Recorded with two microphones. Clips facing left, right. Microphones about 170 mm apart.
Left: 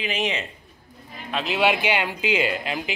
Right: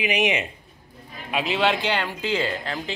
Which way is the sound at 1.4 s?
5° left (ahead or behind).